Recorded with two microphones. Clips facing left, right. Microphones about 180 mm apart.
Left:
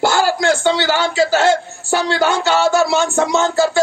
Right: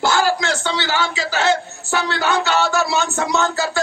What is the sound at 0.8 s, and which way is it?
Speech, 45° left (ahead or behind).